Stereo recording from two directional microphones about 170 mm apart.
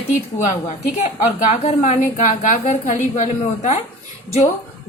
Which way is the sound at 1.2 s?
40° left (ahead or behind).